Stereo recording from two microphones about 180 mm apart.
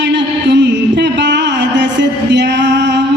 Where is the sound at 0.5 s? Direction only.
75° right (ahead or behind).